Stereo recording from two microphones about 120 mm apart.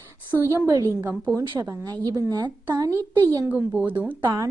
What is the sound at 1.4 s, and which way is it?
A woman's voice, 30° right (ahead or behind).